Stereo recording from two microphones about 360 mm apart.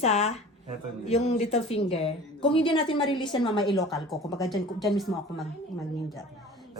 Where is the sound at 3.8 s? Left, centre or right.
Centre.